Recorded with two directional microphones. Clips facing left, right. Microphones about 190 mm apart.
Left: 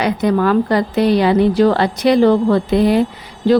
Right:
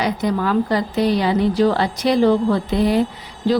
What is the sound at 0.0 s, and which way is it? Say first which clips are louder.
A woman's voice: left 5 dB; 60° left (ahead or behind).